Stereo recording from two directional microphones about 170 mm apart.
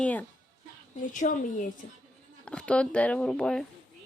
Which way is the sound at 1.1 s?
50° left (ahead or behind).